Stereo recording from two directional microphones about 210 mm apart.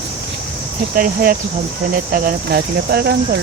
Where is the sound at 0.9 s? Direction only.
45° right (ahead or behind).